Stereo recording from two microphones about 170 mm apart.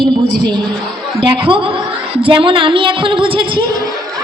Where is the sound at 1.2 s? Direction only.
30° right (ahead or behind).